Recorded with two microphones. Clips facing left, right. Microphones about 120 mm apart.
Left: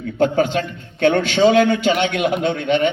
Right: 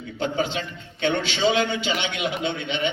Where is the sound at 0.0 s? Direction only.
50° left (ahead or behind).